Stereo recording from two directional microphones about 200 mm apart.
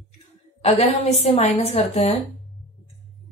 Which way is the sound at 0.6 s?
30° left (ahead or behind).